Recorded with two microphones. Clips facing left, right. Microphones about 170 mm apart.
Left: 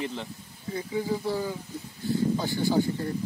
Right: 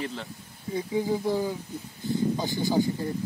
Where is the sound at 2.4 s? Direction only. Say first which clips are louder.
Left 1 dB; 15° right (ahead or behind).